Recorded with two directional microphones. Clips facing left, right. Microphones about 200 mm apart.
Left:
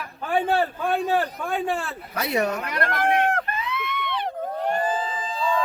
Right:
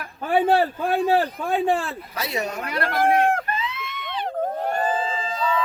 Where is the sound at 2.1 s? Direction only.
55° left (ahead or behind).